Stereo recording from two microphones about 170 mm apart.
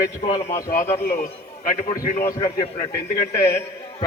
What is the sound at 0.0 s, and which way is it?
Speech, 20° left (ahead or behind).